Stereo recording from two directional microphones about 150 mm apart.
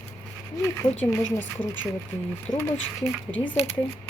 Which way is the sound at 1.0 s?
10° left (ahead or behind).